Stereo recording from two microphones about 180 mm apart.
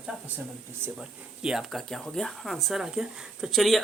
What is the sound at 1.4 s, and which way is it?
Speech, 5° right (ahead or behind).